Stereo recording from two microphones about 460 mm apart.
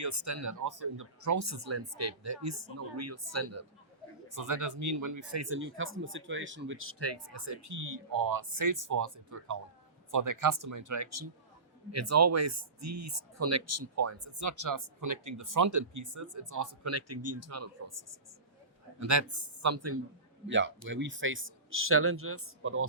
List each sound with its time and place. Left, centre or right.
0.0 s speech: right